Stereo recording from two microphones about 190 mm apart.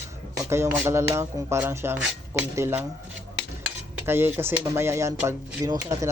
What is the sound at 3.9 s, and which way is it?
Speech, 10° right (ahead or behind).